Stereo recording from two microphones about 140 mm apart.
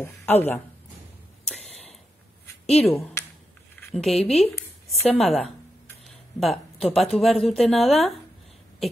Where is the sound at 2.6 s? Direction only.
50° left (ahead or behind).